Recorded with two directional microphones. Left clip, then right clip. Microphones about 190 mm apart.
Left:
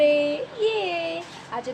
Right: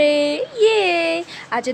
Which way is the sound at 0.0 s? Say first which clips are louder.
Right 3 dB; 45° right (ahead or behind).